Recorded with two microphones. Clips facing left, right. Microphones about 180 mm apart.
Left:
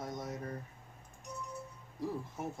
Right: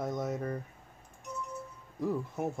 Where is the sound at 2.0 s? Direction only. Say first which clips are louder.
Right 6 dB; 50° right (ahead or behind).